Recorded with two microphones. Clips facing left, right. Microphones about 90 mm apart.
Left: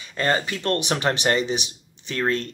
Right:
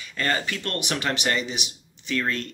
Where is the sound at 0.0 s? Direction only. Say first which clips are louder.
Left 3 dB; 25° left (ahead or behind).